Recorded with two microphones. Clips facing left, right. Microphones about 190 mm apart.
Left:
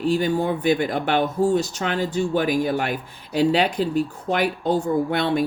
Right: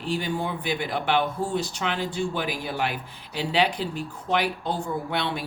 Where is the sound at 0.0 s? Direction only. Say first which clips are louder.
Left 7 dB; 45° left (ahead or behind).